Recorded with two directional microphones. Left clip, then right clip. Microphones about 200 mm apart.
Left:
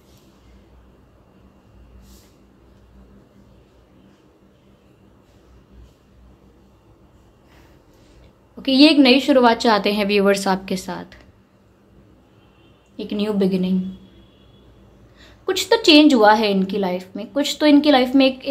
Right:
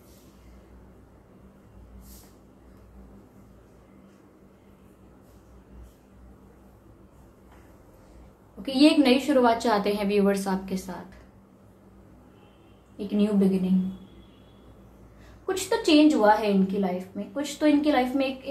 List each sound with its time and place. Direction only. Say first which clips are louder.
8.6 s a woman's voice: left 7 dB; 40° left (ahead or behind)
12.9 s a sound: left 3 dB; 50° left (ahead or behind)
15.4 s a woman's voice: left 9 dB; 50° left (ahead or behind)